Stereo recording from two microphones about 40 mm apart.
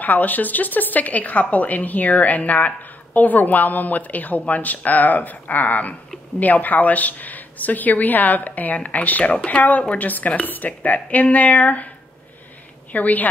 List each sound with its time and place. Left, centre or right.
0.0 s a woman's voice: left
9.2 s speech: left
9.6 s a woman's voice: left
12.9 s a woman's voice: left